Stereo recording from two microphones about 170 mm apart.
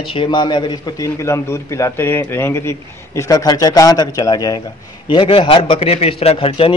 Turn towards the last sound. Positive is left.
turn(degrees=35)  # may be behind; listen again after turning